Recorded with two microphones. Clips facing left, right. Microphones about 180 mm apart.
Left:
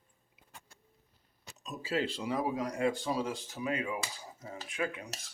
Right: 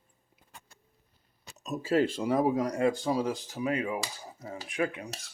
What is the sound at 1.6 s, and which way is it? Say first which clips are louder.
Speech: right 7 dB; 45° right (ahead or behind).